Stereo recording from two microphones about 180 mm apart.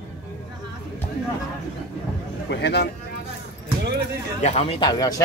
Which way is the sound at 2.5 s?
65° left (ahead or behind).